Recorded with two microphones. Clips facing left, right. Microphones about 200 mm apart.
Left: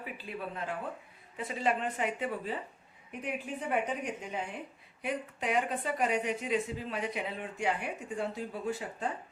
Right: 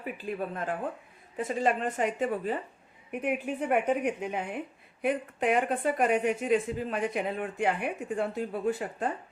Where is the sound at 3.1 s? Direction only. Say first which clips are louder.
Right 7 dB; 60° right (ahead or behind).